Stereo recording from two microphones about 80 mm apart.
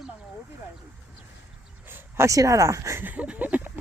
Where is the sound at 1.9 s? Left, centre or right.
Right.